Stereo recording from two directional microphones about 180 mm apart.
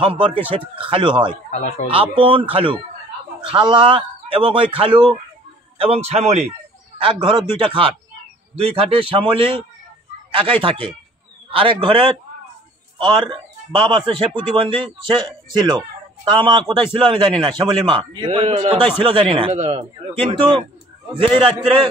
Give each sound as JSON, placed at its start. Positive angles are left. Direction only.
{"t": 0.0, "sound": "a man's voice", "side_deg": -30}
{"t": 1.5, "sound": "speech", "side_deg": 40}
{"t": 2.0, "sound": "a man's voice", "side_deg": -30}